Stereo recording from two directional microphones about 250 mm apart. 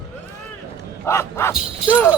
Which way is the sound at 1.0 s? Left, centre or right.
Centre.